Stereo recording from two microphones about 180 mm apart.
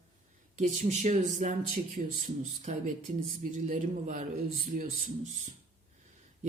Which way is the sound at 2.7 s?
40° right (ahead or behind).